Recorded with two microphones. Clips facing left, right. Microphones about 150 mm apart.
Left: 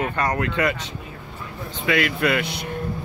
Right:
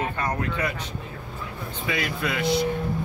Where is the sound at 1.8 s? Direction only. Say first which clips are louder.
Left 7 dB; 80° left.